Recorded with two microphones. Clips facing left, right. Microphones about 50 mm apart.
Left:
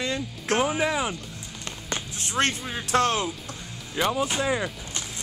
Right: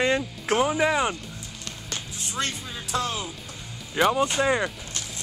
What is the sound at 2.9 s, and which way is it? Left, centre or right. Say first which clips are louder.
Speech: left 6 dB; left.